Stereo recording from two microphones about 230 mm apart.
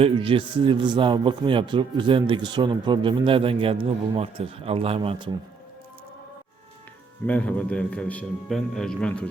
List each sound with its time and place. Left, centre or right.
0.0 s a man's voice: right
7.3 s a man's voice: centre